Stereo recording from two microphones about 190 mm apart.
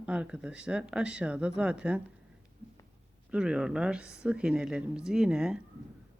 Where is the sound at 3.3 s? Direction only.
5° right (ahead or behind).